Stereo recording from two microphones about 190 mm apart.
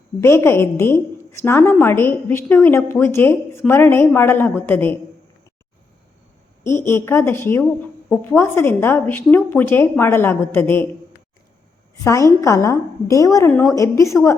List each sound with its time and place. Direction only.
0.2 s a woman's voice: 15° left (ahead or behind)
6.7 s a woman's voice: 15° left (ahead or behind)
12.0 s a woman's voice: 15° left (ahead or behind)